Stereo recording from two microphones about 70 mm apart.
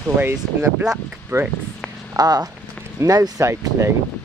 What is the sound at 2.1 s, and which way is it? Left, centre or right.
Speech, right.